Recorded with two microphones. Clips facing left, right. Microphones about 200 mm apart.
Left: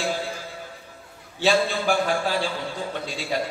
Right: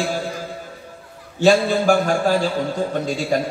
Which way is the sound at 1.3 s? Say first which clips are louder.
Right 6 dB; 45° right (ahead or behind).